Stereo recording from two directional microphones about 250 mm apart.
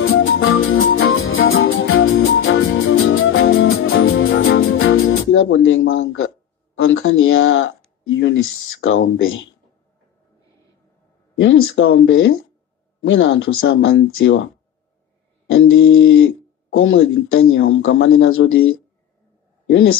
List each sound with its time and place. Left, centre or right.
0.0 s music: left
6.8 s speech: left
11.3 s speech: left
15.5 s speech: left
19.6 s a sound: left